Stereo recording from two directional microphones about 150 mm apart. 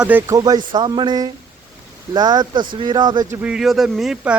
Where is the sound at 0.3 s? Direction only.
25° right (ahead or behind).